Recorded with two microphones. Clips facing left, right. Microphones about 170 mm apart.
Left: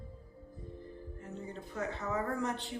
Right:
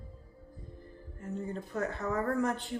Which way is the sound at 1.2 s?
45° right (ahead or behind).